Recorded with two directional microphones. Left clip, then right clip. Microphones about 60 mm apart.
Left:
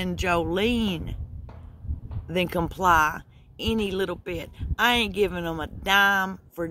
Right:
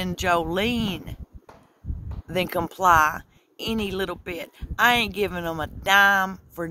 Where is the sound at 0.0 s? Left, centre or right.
Right.